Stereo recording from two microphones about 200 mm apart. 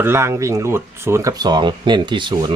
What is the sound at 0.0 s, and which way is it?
Speech, 10° right (ahead or behind).